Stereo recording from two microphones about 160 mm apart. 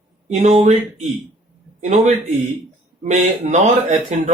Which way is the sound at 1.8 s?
45° right (ahead or behind).